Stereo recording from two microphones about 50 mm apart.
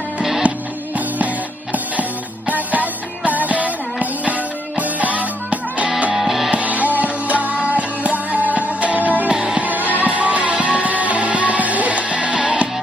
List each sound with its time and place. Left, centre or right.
0.9 s music: right
6.1 s music: centre
6.5 s music: right
9.3 s music: centre
9.6 s music: right